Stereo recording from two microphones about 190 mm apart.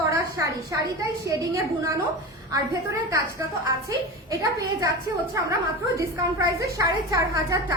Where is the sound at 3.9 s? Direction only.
15° right (ahead or behind).